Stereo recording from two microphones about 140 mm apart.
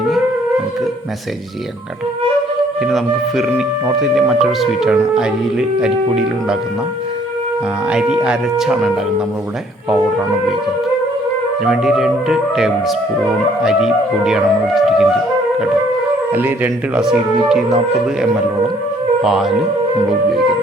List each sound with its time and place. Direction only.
2.8 s speech: centre (ahead or behind)
7.9 s speech: 5° right (ahead or behind)
11.6 s speech: 5° right (ahead or behind)
16.9 s speech: 5° right (ahead or behind)
19.2 s speech: 5° right (ahead or behind)